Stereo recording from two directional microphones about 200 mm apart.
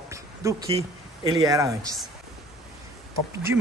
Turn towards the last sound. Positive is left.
turn(degrees=-10)  # may be behind; listen again after turning